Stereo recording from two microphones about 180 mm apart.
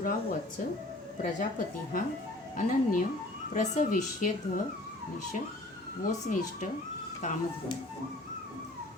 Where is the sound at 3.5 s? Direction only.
45° left (ahead or behind).